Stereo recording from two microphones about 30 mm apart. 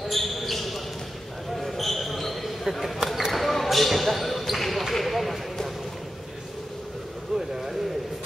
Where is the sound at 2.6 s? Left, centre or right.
Centre.